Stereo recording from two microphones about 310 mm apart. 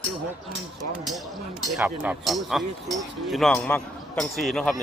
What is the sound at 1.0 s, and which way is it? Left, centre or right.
Speech, centre.